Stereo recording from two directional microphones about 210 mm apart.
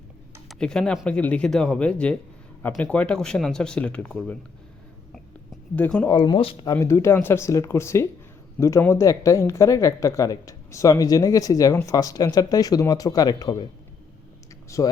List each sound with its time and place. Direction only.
0.4 s speech: 5° left (ahead or behind)
5.7 s speech: 5° left (ahead or behind)
6.1 s speech: 20° left (ahead or behind)
6.7 s speech: 10° left (ahead or behind)
14.7 s speech: 15° left (ahead or behind)